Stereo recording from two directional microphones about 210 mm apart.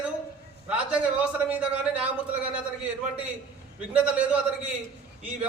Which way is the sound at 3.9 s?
5° right (ahead or behind).